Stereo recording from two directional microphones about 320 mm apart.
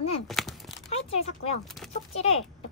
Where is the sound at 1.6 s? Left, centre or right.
Centre.